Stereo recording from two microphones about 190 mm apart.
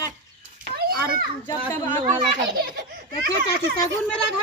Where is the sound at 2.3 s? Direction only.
65° right (ahead or behind).